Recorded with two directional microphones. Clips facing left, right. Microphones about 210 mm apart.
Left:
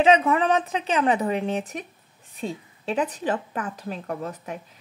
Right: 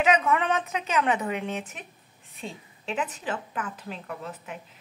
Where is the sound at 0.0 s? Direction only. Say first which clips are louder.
Left 5 dB; 30° left (ahead or behind).